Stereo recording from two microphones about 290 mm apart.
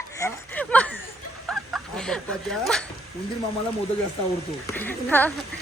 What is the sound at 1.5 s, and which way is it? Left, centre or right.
Fowl, centre.